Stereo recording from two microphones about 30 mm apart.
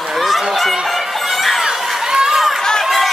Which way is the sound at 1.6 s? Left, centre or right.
Centre.